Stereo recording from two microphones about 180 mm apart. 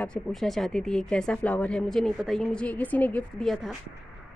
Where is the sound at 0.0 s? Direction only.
5° left (ahead or behind).